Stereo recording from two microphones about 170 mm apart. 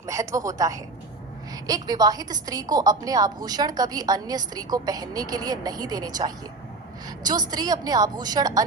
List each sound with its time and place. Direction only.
0.0 s a woman's voice: 20° right (ahead or behind)